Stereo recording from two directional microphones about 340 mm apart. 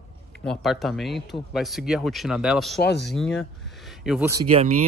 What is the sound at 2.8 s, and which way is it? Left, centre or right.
Speech, left.